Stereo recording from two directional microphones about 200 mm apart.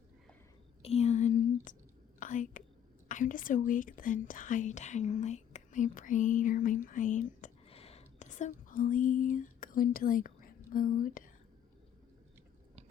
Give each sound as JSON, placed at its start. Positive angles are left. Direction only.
{"t": 0.8, "sound": "whispering", "side_deg": 30}
{"t": 3.1, "sound": "speech", "side_deg": 40}